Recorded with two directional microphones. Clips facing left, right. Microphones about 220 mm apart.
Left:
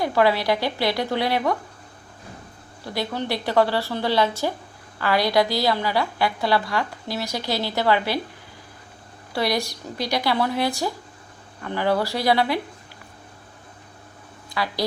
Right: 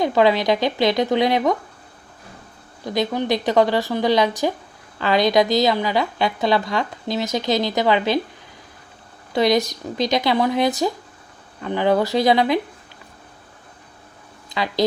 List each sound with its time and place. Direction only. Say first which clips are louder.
0.0 s a woman's voice: right 3 dB; 20° right (ahead or behind)
2.8 s a woman's voice: right 5 dB; 20° right (ahead or behind)
9.3 s a woman's voice: right 6 dB; 20° right (ahead or behind)
14.5 s a woman's voice: right 5 dB; 20° right (ahead or behind)